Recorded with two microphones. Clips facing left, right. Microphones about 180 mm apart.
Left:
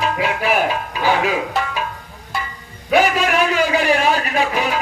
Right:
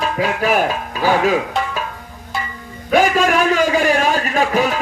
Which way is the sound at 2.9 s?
45° right (ahead or behind).